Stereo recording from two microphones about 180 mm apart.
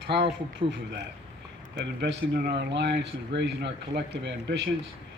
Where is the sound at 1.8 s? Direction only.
75° right (ahead or behind).